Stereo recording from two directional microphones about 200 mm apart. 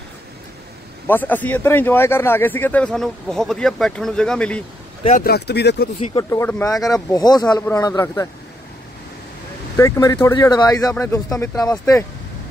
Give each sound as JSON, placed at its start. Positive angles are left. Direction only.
{"t": 1.0, "sound": "a man's voice", "side_deg": 10}
{"t": 5.2, "sound": "speech", "side_deg": 55}
{"t": 6.3, "sound": "a man's voice", "side_deg": 15}
{"t": 9.8, "sound": "a man's voice", "side_deg": 15}